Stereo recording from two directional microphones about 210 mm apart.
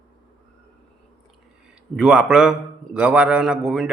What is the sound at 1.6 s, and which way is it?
A man's voice, 5° right (ahead or behind).